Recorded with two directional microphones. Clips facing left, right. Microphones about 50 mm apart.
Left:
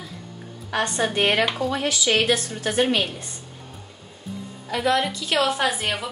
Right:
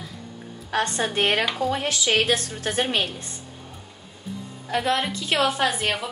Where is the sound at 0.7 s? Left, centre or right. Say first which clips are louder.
Left 1 dB; left.